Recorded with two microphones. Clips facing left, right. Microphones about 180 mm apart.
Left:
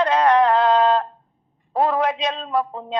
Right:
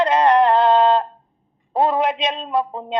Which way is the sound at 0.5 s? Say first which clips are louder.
Right 2 dB; 25° right (ahead or behind).